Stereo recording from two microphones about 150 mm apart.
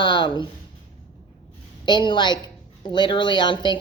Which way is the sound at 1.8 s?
30° left (ahead or behind).